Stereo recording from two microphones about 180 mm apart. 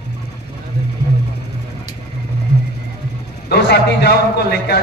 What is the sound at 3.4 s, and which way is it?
A man's voice, 65° left (ahead or behind).